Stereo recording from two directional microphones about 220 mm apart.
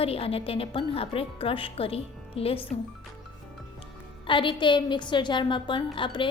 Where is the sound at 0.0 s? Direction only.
25° left (ahead or behind).